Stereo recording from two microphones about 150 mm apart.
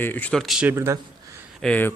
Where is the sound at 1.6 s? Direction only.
10° left (ahead or behind).